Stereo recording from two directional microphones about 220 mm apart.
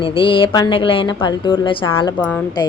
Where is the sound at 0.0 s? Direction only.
25° left (ahead or behind).